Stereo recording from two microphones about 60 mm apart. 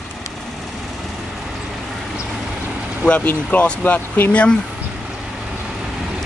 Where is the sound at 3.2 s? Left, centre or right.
Left.